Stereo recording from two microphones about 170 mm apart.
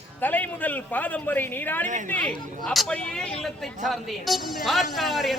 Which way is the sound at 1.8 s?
45° right (ahead or behind).